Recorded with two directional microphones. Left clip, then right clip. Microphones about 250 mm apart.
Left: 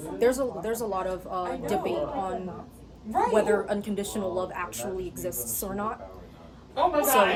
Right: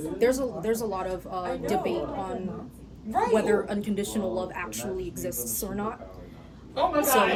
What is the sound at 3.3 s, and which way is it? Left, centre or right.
A woman's voice, centre.